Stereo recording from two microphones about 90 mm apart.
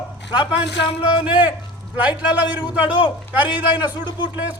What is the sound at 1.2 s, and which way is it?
A man's voice, 15° right (ahead or behind).